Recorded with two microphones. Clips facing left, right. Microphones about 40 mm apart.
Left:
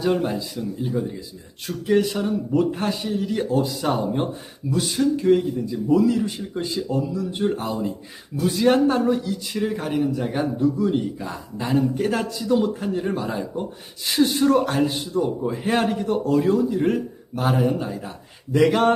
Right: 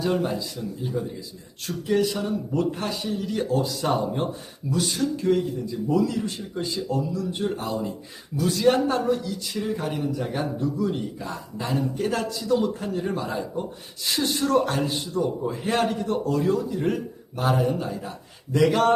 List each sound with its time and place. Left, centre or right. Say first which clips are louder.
0.0 s a man's voice: left 3 dB; centre